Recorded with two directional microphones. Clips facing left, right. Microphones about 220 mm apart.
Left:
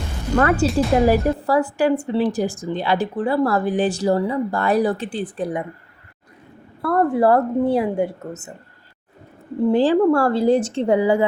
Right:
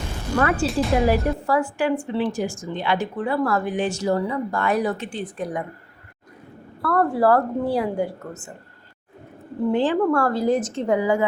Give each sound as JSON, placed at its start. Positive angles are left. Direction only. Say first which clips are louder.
{"t": 0.7, "sound": "speech", "louder": "left 3 dB", "side_deg": 0}
{"t": 1.0, "sound": "a woman's voice", "louder": "left 3 dB", "side_deg": 35}
{"t": 6.8, "sound": "a woman's voice", "louder": "left 2 dB", "side_deg": 20}
{"t": 9.7, "sound": "a woman's voice", "louder": "left 4 dB", "side_deg": 35}